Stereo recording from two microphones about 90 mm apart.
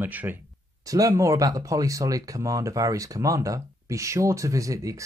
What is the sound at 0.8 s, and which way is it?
Speech, 40° right (ahead or behind).